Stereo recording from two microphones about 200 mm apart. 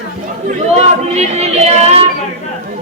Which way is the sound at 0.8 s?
30° right (ahead or behind).